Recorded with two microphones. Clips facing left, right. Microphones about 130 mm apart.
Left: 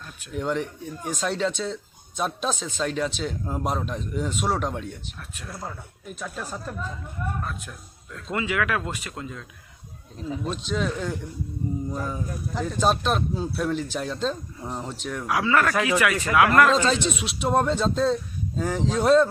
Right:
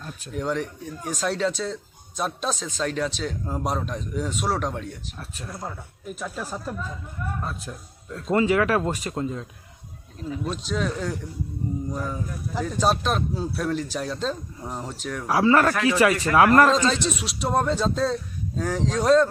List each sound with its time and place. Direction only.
0.3 s speech: centre (ahead or behind)
7.4 s speech: 30° right (ahead or behind)
10.4 s speech: centre (ahead or behind)
15.3 s speech: 35° right (ahead or behind)
16.9 s speech: centre (ahead or behind)